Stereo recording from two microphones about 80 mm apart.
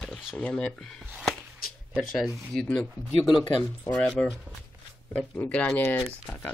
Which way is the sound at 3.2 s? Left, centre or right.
Left.